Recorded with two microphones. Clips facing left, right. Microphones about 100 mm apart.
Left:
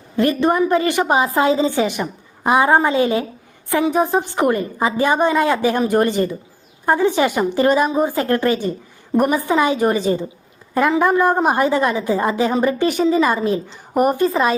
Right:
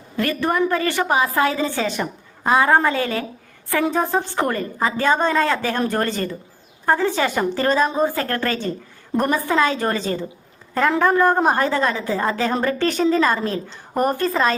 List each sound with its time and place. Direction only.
0.2 s a woman's voice: 20° left (ahead or behind)